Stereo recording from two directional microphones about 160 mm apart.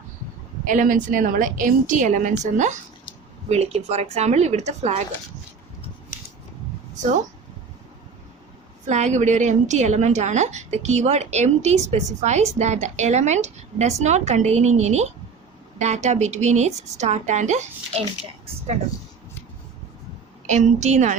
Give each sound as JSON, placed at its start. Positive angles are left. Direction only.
{"t": 0.6, "sound": "a woman's voice", "side_deg": -55}
{"t": 8.9, "sound": "a woman's voice", "side_deg": -45}
{"t": 20.5, "sound": "a woman's voice", "side_deg": -45}